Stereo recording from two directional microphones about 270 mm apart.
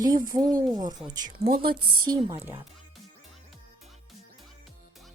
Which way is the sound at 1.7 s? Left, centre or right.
Centre.